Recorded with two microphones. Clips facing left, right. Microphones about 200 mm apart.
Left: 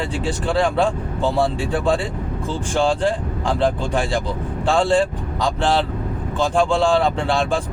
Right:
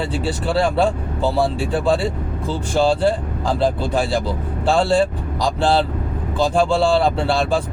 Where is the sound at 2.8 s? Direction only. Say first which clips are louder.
Right 3 dB; 5° right (ahead or behind).